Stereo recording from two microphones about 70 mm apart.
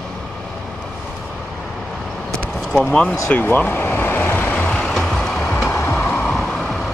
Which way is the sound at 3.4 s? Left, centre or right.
Left.